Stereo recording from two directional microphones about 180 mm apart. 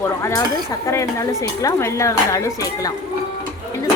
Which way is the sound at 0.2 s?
15° left (ahead or behind).